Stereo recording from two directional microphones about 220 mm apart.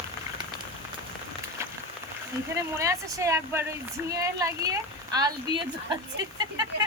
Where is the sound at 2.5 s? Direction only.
15° right (ahead or behind).